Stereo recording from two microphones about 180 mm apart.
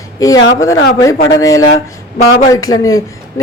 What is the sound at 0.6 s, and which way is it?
Speech, 70° left (ahead or behind).